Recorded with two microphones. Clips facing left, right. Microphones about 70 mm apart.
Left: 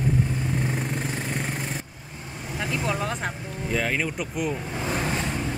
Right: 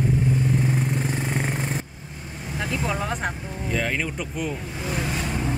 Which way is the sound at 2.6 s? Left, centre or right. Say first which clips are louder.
Even; centre.